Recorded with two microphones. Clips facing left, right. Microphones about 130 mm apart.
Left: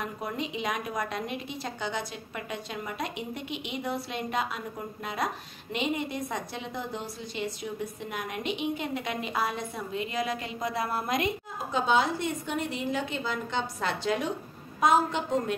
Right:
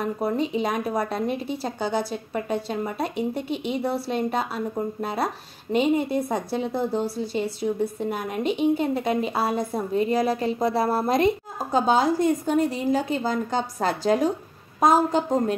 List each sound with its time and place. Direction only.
0.0 s a woman's voice: 35° right (ahead or behind)